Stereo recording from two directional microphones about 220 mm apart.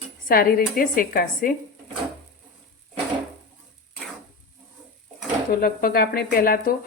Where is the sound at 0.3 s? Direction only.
40° left (ahead or behind).